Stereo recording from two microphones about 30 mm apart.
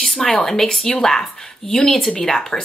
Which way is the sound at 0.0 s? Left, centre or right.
Centre.